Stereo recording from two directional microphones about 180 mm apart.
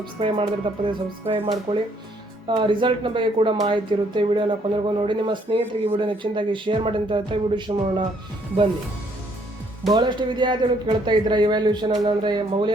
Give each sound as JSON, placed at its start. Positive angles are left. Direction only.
{"t": 0.0, "sound": "speech", "side_deg": -30}
{"t": 9.9, "sound": "speech", "side_deg": -25}